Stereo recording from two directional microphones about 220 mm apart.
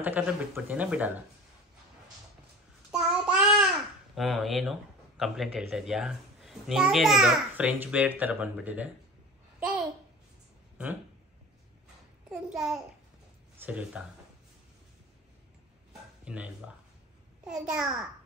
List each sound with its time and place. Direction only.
0.0 s speech: 5° right (ahead or behind)
2.9 s child singing: 5° right (ahead or behind)
4.1 s speech: centre (ahead or behind)
12.3 s babbling: centre (ahead or behind)
13.7 s speech: 5° right (ahead or behind)
16.3 s speech: 5° right (ahead or behind)